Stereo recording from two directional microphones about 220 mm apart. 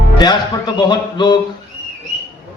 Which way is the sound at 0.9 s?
20° left (ahead or behind).